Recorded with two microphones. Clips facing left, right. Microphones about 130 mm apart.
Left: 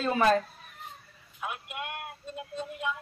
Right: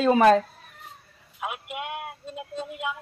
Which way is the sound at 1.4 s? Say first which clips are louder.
Right 4 dB; 90° right.